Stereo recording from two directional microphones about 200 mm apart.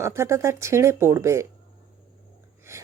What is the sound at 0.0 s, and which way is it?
Speech, 15° right (ahead or behind).